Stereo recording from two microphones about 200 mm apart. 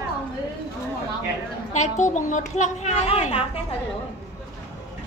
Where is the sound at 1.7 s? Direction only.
35° left (ahead or behind).